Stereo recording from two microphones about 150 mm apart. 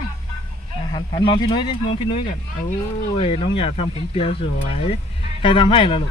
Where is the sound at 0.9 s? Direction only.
30° left (ahead or behind).